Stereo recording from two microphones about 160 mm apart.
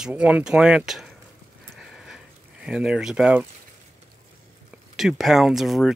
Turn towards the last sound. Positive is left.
turn(degrees=0)  # may be behind; listen again after turning